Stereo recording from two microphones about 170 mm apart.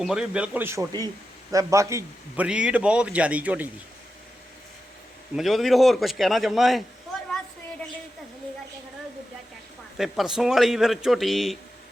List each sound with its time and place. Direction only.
0.0 s a man's voice: 5° right (ahead or behind)
5.4 s speech: centre (ahead or behind)
10.0 s speech: centre (ahead or behind)